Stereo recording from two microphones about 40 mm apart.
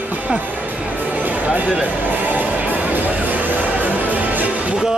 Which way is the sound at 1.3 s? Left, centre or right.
Right.